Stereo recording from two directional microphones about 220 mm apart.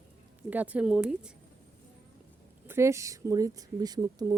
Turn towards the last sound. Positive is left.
turn(degrees=-15)  # may be behind; listen again after turning